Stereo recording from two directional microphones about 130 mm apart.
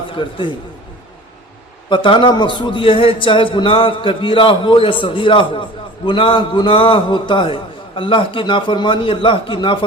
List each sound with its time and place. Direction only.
0.1 s a man's voice: 40° left (ahead or behind)
1.9 s a man's voice: 40° left (ahead or behind)